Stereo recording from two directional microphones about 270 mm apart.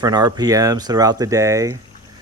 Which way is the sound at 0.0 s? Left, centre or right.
Centre.